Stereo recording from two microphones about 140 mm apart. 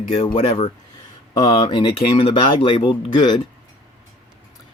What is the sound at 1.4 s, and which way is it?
Speech, 35° left (ahead or behind).